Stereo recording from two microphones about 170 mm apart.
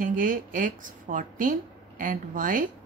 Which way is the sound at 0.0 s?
50° right (ahead or behind).